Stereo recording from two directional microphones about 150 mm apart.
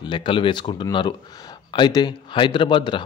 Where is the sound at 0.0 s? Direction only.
30° left (ahead or behind).